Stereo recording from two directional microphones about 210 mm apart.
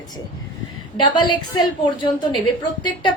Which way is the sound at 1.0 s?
20° left (ahead or behind).